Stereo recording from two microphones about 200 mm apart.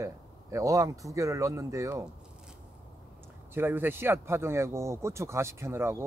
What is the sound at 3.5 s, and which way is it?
Speech, 10° right (ahead or behind).